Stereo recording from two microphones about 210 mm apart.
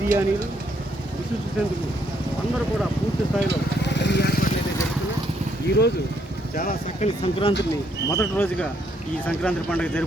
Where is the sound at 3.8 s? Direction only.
55° left (ahead or behind).